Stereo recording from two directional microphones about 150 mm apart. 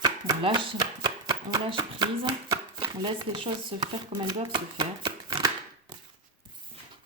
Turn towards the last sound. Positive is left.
turn(degrees=-30)  # may be behind; listen again after turning